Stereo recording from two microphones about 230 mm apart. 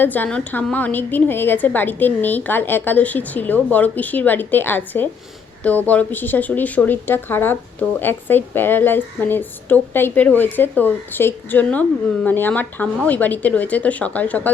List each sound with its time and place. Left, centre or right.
0.0 s speech: centre